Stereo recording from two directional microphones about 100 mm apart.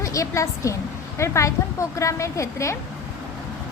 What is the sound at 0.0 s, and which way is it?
A woman's voice, 30° left (ahead or behind).